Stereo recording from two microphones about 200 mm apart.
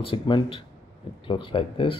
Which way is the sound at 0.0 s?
25° left (ahead or behind).